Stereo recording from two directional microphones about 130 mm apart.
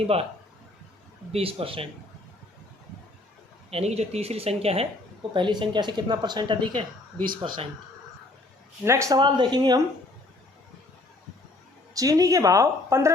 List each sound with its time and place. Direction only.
1.3 s speech: 45° right (ahead or behind)
3.7 s speech: 50° right (ahead or behind)
5.3 s speech: 35° right (ahead or behind)
8.8 s a woman's voice: 20° right (ahead or behind)
9.1 s speech: 35° right (ahead or behind)
11.9 s a woman's voice: 25° right (ahead or behind)